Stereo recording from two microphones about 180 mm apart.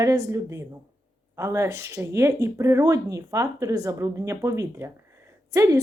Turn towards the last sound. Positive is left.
turn(degrees=-15)  # may be behind; listen again after turning